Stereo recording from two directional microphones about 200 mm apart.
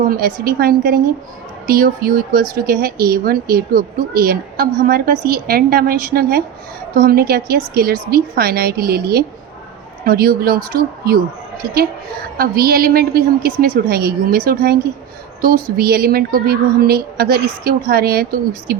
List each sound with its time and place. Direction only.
0.0 s speech: 45° right (ahead or behind)